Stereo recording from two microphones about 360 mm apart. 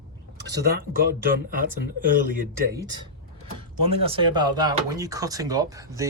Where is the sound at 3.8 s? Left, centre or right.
Centre.